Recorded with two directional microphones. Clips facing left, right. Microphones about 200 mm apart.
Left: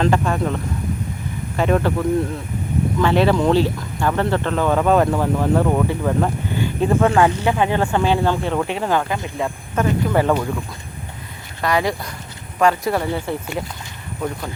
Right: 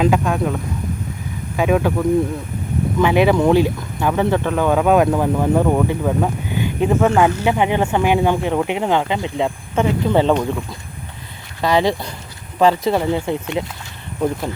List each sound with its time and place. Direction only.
0.0 s speech: 5° right (ahead or behind); by 10.3 s 20° right (ahead or behind)
11.6 s speech: 25° right (ahead or behind)